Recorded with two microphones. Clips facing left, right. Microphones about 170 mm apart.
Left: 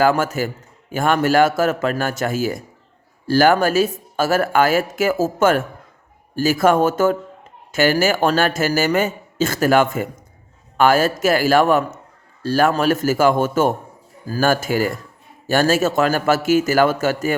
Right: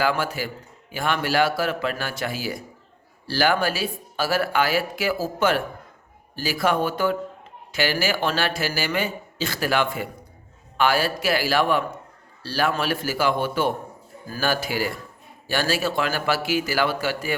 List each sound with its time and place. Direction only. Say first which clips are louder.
0.0 s speech: left 7 dB; 45° left (ahead or behind)